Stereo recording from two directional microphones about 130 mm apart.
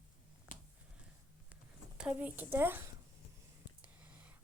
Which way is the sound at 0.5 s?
90° left.